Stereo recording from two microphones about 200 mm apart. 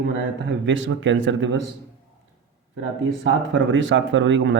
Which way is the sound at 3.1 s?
65° right (ahead or behind).